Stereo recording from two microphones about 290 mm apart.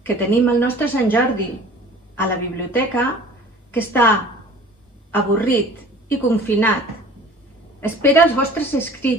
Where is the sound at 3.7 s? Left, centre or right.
Centre.